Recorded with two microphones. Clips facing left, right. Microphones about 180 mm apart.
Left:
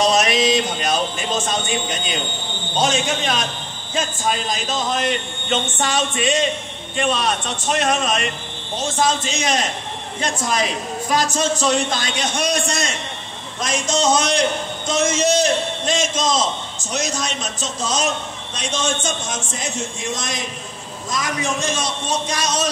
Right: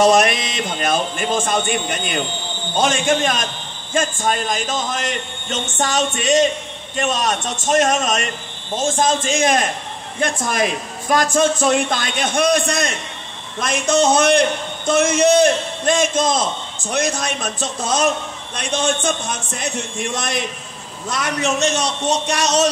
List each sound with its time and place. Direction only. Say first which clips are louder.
0.0 s a man's voice: right 3 dB; 55° right (ahead or behind); by 22.7 s 70° right (ahead or behind)